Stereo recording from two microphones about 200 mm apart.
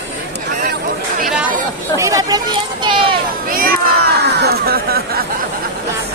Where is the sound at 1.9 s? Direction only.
15° right (ahead or behind).